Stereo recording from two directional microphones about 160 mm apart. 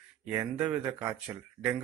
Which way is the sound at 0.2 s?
10° right (ahead or behind).